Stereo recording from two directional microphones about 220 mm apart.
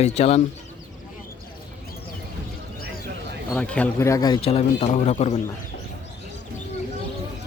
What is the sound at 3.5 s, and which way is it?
A man's voice, 5° left (ahead or behind).